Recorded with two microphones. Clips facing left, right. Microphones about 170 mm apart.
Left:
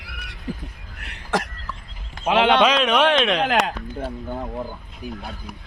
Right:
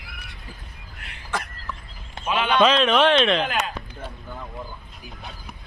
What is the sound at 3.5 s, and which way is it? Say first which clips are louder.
Speech: left 6 dB; 90° left.